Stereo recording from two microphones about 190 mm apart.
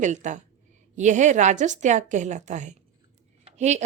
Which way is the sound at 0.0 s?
40° right (ahead or behind).